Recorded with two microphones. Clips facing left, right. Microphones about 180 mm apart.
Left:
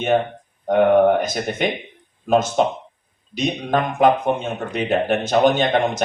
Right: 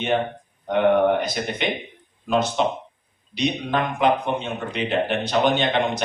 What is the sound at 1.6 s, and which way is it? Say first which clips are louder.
Speech: left 3 dB; 45° left (ahead or behind).